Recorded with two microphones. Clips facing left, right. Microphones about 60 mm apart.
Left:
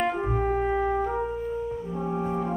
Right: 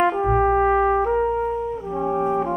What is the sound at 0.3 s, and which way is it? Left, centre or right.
Brass instrument, right.